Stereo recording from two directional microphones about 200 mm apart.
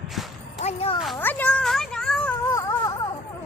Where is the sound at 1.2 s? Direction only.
10° left (ahead or behind).